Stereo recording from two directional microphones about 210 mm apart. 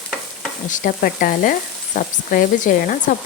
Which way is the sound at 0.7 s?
40° left (ahead or behind).